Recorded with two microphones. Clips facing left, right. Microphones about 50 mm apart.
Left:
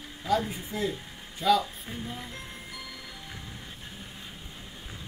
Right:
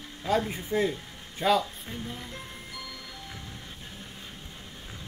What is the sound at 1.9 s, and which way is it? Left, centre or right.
Speech, centre.